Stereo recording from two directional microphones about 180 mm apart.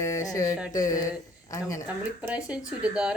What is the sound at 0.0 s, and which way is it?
Music, 20° left (ahead or behind).